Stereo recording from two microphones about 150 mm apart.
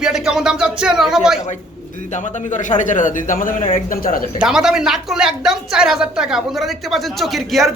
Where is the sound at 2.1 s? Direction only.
55° left (ahead or behind); by 4.2 s 70° left (ahead or behind).